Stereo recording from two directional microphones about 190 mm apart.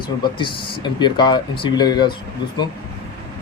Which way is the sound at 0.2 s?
25° left (ahead or behind).